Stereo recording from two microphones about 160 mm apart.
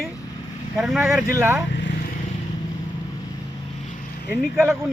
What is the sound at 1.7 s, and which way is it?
Vehicle, 90° left.